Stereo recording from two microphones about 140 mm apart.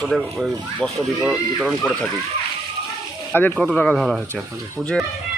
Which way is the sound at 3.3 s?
15° left (ahead or behind).